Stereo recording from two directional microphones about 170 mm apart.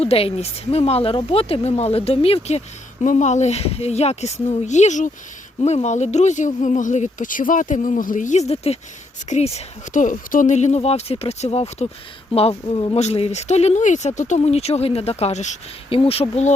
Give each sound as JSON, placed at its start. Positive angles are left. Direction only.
{"t": 0.0, "sound": "speech", "side_deg": 35}